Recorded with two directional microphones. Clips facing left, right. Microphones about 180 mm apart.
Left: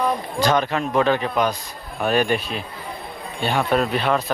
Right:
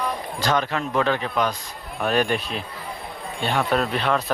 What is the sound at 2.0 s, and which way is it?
A man's voice, 5° left (ahead or behind).